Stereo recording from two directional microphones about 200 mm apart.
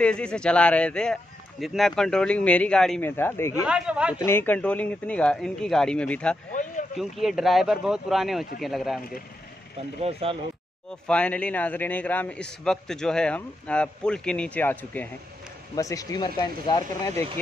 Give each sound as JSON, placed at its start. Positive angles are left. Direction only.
{"t": 0.0, "sound": "a man's voice", "side_deg": 5}
{"t": 3.6, "sound": "a man's voice", "side_deg": -5}
{"t": 4.3, "sound": "a man's voice", "side_deg": 10}
{"t": 10.2, "sound": "speech", "side_deg": -30}
{"t": 11.1, "sound": "a man's voice", "side_deg": 5}